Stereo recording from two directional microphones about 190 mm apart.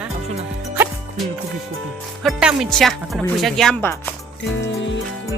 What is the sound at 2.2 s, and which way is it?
Speech, centre (ahead or behind).